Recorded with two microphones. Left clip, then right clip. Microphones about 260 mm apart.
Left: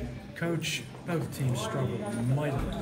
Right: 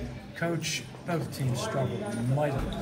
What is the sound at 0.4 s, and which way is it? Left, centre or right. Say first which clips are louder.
A man's voice: right 1 dB; centre.